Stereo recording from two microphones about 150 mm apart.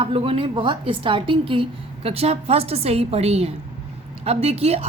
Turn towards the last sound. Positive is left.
turn(degrees=-45)  # may be behind; listen again after turning